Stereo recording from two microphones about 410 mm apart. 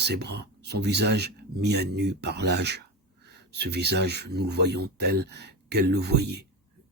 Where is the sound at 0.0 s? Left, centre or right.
Right.